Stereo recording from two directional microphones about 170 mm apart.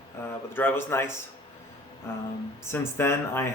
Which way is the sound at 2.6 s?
15° left (ahead or behind).